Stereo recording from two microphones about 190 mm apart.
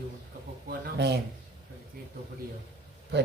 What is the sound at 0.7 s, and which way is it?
Speech, 60° right (ahead or behind).